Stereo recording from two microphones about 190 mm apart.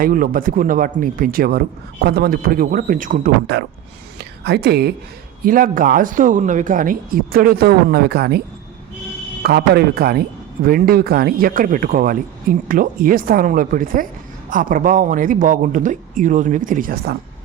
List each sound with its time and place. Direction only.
0.0 s a man's voice: 50° right (ahead or behind)
3.5 s a woman's voice: 60° right (ahead or behind)
5.5 s a man's voice: 45° right (ahead or behind)
9.4 s a man's voice: 55° right (ahead or behind)